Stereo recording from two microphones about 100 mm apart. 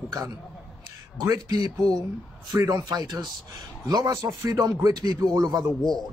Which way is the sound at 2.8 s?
40° right (ahead or behind).